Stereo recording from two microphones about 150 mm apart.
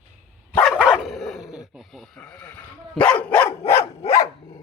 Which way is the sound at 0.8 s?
5° right (ahead or behind).